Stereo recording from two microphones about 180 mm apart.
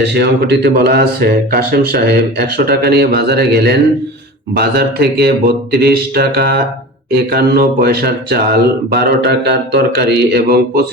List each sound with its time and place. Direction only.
0.0 s speech: 65° right (ahead or behind)